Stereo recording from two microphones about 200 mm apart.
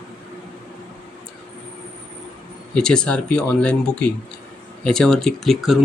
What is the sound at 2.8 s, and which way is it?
Speech, 5° left (ahead or behind).